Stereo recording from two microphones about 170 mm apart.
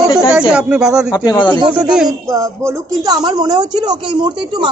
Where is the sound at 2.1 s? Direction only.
20° right (ahead or behind).